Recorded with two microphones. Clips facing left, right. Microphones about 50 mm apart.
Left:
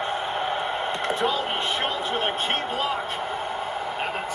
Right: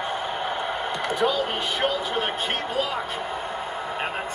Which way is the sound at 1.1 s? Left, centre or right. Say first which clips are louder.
Right 1 dB; left.